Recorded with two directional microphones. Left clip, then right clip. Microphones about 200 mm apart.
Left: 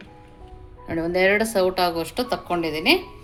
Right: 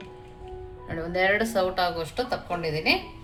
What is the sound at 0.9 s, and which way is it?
A woman's voice, 35° left (ahead or behind).